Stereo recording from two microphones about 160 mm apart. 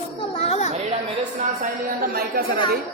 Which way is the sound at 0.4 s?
40° left (ahead or behind).